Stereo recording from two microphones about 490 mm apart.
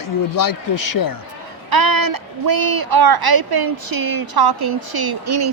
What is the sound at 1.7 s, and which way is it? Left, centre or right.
A woman's voice, right.